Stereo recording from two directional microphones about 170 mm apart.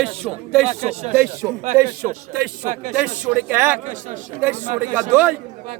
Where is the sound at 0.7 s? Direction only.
40° right (ahead or behind).